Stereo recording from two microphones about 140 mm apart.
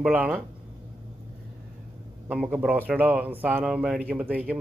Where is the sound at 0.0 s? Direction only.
10° right (ahead or behind).